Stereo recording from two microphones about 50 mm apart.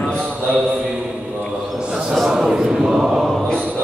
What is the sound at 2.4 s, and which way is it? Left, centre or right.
Chant, centre.